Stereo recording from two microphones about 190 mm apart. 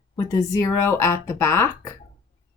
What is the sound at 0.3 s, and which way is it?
Speech, 15° left (ahead or behind).